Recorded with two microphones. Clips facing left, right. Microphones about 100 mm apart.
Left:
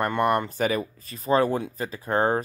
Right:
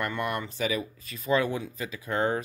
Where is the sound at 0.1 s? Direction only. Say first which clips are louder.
Left 8 dB; 55° left (ahead or behind).